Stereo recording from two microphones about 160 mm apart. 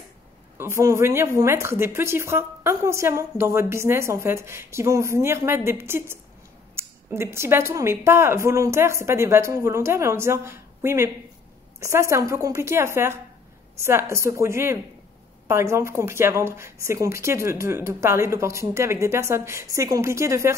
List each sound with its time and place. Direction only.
0.6 s a woman's voice: 15° right (ahead or behind)